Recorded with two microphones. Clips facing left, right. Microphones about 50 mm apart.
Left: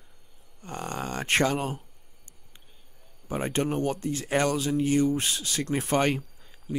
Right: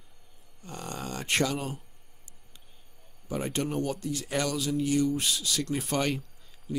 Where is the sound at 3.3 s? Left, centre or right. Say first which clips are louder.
Left 3 dB; left.